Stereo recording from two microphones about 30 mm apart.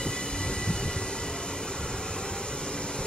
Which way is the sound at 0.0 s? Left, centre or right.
Left.